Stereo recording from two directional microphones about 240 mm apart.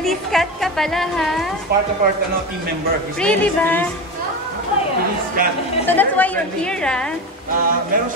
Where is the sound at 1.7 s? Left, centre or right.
Right.